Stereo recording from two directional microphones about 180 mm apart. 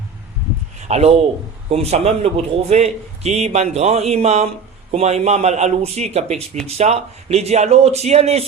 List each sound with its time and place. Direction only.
0.8 s a man's voice: 40° right (ahead or behind)